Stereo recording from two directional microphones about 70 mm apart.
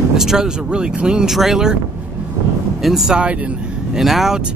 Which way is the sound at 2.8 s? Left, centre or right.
Centre.